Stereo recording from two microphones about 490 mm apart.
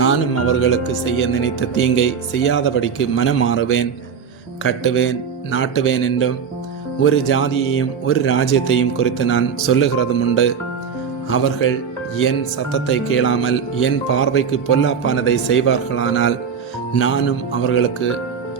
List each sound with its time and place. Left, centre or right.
0.0 s speech: left
12.7 s speech: left